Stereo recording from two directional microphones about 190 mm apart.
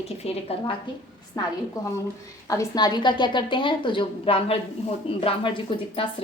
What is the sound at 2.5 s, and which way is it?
A woman's voice, 20° left (ahead or behind).